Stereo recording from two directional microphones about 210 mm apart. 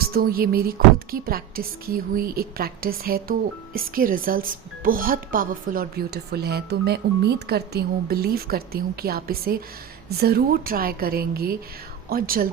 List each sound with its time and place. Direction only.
0.1 s a woman's voice: 45° right (ahead or behind)